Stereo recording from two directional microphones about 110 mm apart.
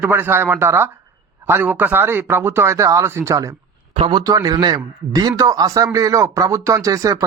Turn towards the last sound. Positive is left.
turn(degrees=-30)  # may be behind; listen again after turning